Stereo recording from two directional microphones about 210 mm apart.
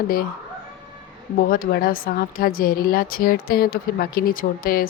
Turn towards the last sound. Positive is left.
turn(degrees=40)  # may be behind; listen again after turning